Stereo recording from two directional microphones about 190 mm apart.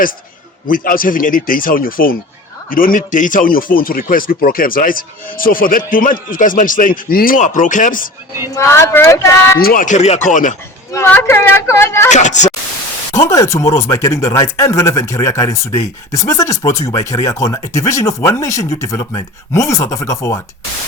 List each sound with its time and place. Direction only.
0.7 s speech: 45° left (ahead or behind)
8.5 s speech: 15° left (ahead or behind)
9.6 s speech: 50° left (ahead or behind)
10.9 s speech: 10° left (ahead or behind)
12.1 s speech: 40° left (ahead or behind)
13.1 s speech: 15° left (ahead or behind)